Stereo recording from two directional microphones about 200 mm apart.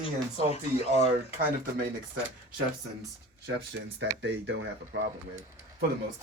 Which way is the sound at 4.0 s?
60° right (ahead or behind).